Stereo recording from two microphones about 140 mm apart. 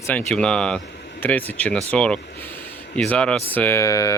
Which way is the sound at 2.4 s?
15° left (ahead or behind).